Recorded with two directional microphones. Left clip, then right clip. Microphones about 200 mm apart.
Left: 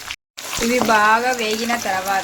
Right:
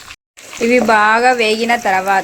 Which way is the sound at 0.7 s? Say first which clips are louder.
Right 4 dB; 30° right (ahead or behind).